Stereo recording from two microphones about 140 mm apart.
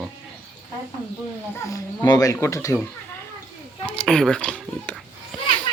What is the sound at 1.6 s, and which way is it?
Speech, 25° left (ahead or behind).